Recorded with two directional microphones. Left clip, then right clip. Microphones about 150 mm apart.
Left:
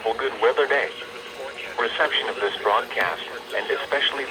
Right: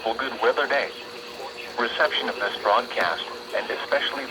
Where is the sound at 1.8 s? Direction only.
20° right (ahead or behind).